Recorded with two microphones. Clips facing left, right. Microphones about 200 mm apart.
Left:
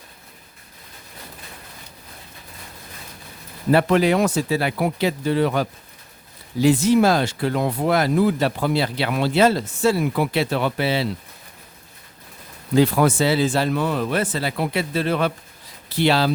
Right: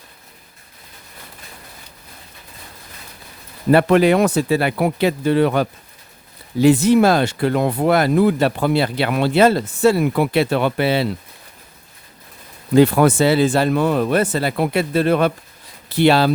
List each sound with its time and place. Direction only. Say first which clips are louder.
3.7 s speech: right 4 dB; 60° right (ahead or behind)
12.7 s speech: right 4 dB; 60° right (ahead or behind)